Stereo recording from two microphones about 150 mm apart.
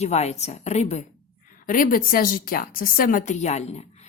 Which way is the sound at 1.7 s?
65° left (ahead or behind).